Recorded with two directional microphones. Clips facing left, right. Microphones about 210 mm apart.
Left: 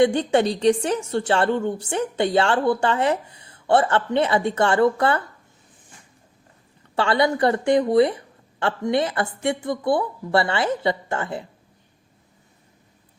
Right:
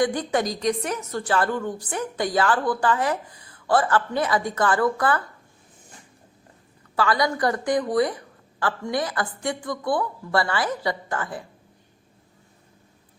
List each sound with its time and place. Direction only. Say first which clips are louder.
0.0 s a woman's voice: left 5 dB; 25° left (ahead or behind)
6.9 s a woman's voice: left 3 dB; 25° left (ahead or behind)